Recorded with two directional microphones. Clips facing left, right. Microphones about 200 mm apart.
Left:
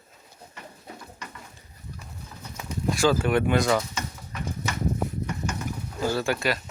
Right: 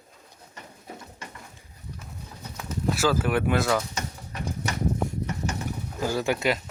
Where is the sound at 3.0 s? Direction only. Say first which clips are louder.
Left 3 dB; 5° right (ahead or behind).